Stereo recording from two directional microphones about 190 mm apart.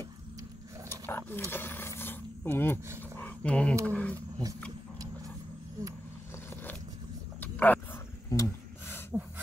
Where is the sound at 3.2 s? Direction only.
5° left (ahead or behind).